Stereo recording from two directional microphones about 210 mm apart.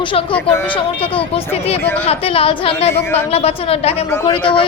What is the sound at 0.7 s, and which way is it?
Speech, 25° left (ahead or behind).